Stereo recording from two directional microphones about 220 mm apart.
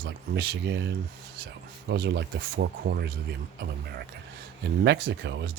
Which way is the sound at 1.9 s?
50° right (ahead or behind).